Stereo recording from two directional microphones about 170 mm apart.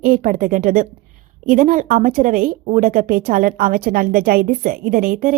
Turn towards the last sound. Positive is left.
turn(degrees=-55)  # may be behind; listen again after turning